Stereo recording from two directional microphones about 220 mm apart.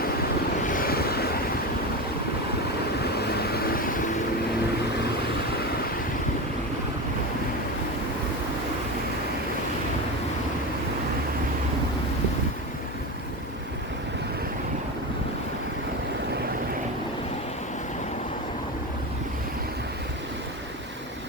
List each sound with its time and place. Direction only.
0.7 s waves: 40° left (ahead or behind)
3.0 s vehicle: 45° left (ahead or behind)